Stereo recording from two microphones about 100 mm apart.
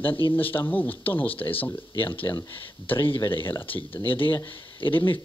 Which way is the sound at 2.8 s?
20° left (ahead or behind).